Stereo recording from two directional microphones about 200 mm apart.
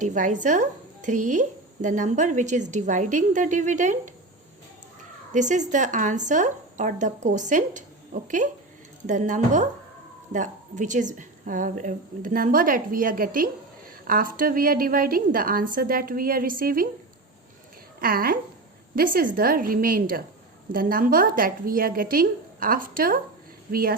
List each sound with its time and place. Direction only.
0.0 s a woman's voice: 40° right (ahead or behind)
5.3 s a woman's voice: 40° right (ahead or behind)
18.0 s a woman's voice: 45° right (ahead or behind)